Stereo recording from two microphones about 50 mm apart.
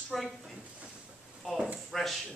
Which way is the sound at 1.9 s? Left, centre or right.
Centre.